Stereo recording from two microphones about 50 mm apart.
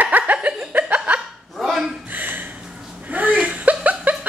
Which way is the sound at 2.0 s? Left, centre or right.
Right.